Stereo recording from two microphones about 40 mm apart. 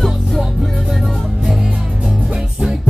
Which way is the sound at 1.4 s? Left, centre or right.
Centre.